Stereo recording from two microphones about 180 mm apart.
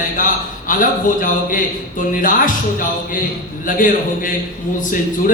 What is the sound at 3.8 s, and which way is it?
Speech, 50° left (ahead or behind).